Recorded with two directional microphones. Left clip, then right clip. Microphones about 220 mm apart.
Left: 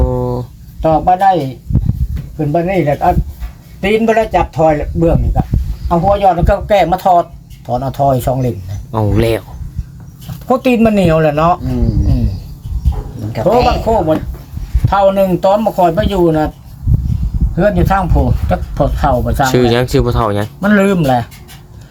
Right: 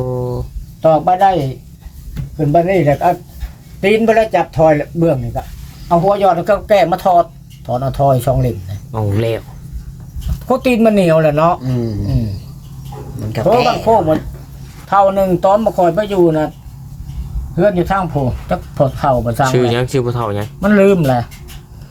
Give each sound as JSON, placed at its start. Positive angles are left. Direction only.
{"t": 0.0, "sound": "a sound", "side_deg": 25}
{"t": 0.8, "sound": "speech", "side_deg": -5}
{"t": 2.5, "sound": "speech", "side_deg": -10}
{"t": 8.9, "sound": "speech", "side_deg": 25}
{"t": 10.4, "sound": "speech", "side_deg": 0}
{"t": 13.7, "sound": "speech", "side_deg": 0}
{"t": 17.5, "sound": "speech", "side_deg": 10}
{"t": 19.5, "sound": "speech", "side_deg": 20}
{"t": 20.6, "sound": "speech", "side_deg": 0}